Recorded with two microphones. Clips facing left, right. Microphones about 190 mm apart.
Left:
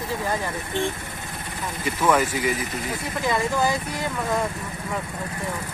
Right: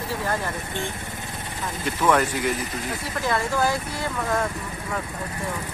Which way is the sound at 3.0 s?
15° left (ahead or behind).